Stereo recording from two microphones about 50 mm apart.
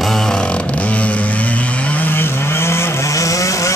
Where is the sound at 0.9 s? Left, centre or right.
Left.